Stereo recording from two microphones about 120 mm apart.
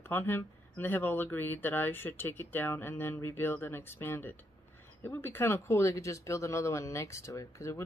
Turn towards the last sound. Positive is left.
turn(degrees=25)  # may be behind; listen again after turning